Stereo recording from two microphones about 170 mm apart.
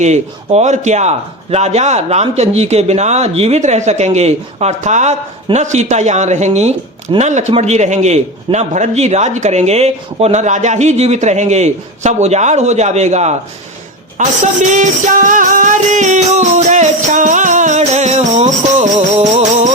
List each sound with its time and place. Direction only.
0.0 s a man's voice: 45° right (ahead or behind)
14.4 s music: 45° right (ahead or behind)